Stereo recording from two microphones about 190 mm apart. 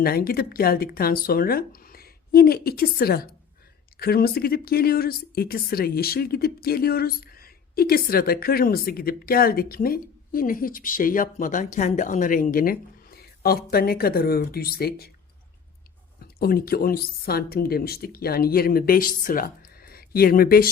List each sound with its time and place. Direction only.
0.0 s speech: 50° left (ahead or behind)
16.2 s speech: 50° left (ahead or behind)